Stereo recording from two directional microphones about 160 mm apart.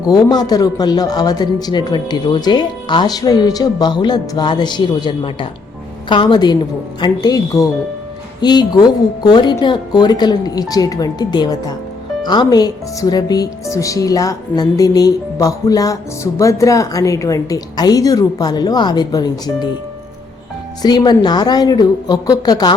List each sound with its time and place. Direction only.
0.0 s speech: 25° left (ahead or behind)
20.8 s speech: 25° left (ahead or behind)